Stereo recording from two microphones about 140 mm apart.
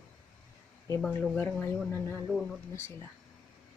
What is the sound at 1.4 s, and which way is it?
Speech, 15° left (ahead or behind).